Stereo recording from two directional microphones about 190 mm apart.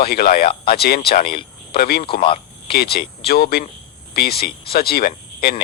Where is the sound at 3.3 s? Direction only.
55° left (ahead or behind).